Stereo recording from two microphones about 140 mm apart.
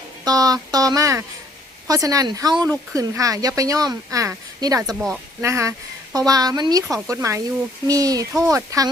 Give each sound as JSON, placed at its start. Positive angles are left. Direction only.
{"t": 0.3, "sound": "speech", "side_deg": -25}